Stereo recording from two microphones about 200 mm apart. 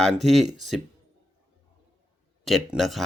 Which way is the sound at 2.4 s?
Centre (ahead or behind).